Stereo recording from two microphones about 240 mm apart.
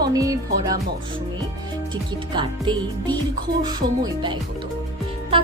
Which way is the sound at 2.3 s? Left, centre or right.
Centre.